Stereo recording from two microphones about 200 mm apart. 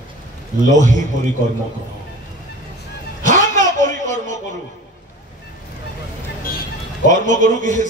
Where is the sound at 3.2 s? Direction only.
40° right (ahead or behind).